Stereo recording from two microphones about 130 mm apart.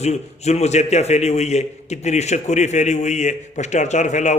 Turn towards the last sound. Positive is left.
turn(degrees=65)  # may be behind; listen again after turning